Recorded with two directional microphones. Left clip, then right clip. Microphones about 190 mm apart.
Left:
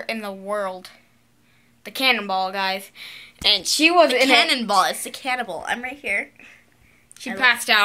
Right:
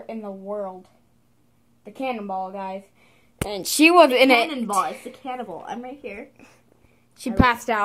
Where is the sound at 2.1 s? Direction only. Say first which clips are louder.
Left 6 dB; 40° left (ahead or behind).